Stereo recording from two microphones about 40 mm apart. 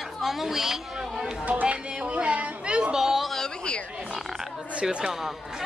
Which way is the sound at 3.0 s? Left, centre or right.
Centre.